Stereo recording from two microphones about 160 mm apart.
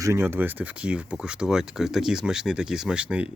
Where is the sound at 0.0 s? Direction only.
15° right (ahead or behind).